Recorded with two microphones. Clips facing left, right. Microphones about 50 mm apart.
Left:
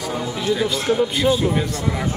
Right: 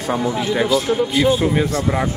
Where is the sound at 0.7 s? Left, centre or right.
Centre.